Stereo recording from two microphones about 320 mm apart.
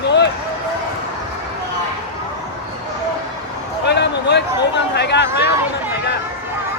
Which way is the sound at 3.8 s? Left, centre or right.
Left.